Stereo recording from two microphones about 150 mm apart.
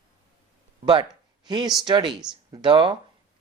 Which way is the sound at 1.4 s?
30° right (ahead or behind).